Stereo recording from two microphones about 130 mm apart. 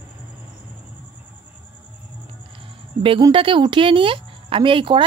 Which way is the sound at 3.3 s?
40° right (ahead or behind).